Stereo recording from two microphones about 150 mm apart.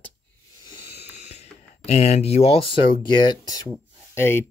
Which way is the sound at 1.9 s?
45° left (ahead or behind).